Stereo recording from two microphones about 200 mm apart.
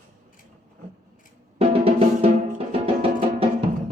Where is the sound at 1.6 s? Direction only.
30° right (ahead or behind).